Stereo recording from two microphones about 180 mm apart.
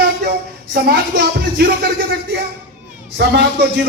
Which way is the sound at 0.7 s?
60° right (ahead or behind).